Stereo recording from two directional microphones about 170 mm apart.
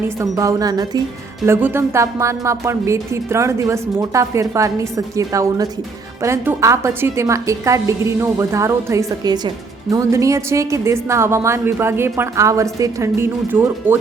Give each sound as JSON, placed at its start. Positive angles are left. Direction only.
{"t": 0.2, "sound": "a woman's voice", "side_deg": -20}